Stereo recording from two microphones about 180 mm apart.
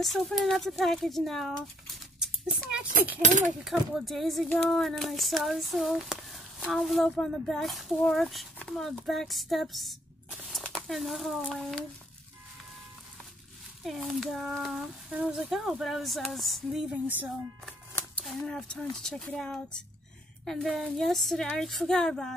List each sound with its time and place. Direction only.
0.0 s speech: centre (ahead or behind)
2.1 s a sound: 5° right (ahead or behind)
3.2 s speech: 40° right (ahead or behind)
3.6 s speech: centre (ahead or behind)
13.8 s speech: centre (ahead or behind)
18.5 s speech: 5° left (ahead or behind)